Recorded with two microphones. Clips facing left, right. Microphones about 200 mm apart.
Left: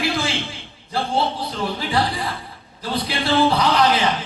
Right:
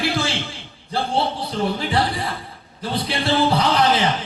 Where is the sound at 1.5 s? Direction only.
30° right (ahead or behind).